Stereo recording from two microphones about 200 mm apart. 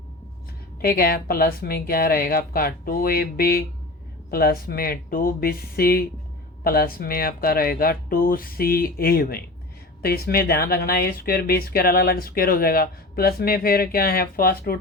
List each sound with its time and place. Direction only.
0.8 s speech: 50° left (ahead or behind)